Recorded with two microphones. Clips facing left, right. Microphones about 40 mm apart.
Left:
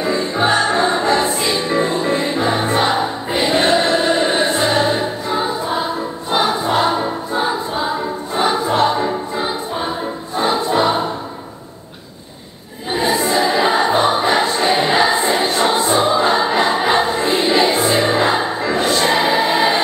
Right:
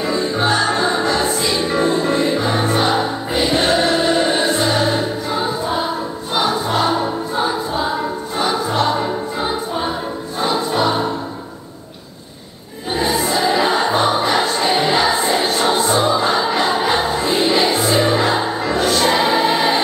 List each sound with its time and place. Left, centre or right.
0.0 s music: left
3.3 s choir: left
4.0 s music: left
6.3 s choir: left
8.4 s music: left
9.0 s music: centre
10.3 s music: left
12.9 s choir: left
13.3 s music: left